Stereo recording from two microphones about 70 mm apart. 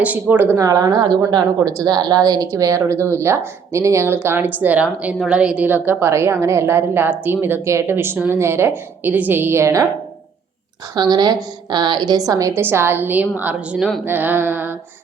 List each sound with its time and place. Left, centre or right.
0.0 s speech: right
0.5 s speech: right
0.9 s a woman's voice: right
1.3 s speech: right
5.1 s a woman's voice: centre
5.4 s a woman's voice: centre
5.6 s speech: right
10.9 s a woman's voice: right
11.7 s a woman's voice: right
12.5 s speech: right
14.0 s a sound: right